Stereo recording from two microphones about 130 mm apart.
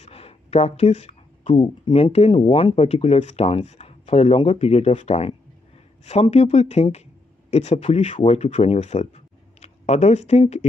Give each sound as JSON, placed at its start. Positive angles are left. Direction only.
{"t": 0.0, "sound": "speech", "side_deg": 50}
{"t": 6.3, "sound": "speech", "side_deg": 55}